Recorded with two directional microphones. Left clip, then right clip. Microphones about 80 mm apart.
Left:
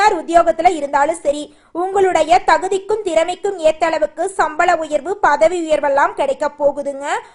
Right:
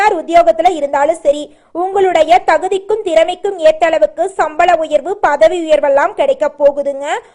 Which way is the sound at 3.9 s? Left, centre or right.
Left.